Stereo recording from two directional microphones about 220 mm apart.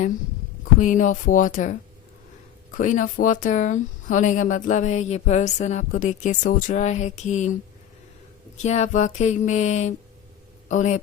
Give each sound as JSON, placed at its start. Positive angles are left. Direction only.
{"t": 0.8, "sound": "speech", "side_deg": 35}
{"t": 2.7, "sound": "speech", "side_deg": 35}
{"t": 8.6, "sound": "speech", "side_deg": 30}